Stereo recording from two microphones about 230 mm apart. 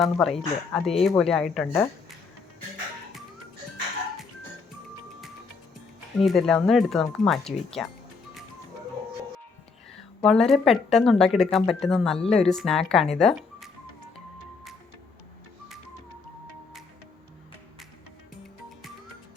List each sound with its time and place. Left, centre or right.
0.0 s speech: centre
6.2 s speech: centre
10.2 s speech: centre
12.2 s speech: left
12.5 s speech: centre